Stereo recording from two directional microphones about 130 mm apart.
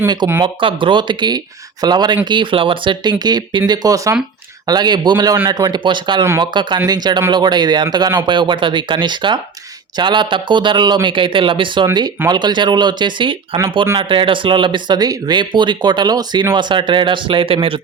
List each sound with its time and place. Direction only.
0.4 s speech: 40° right (ahead or behind)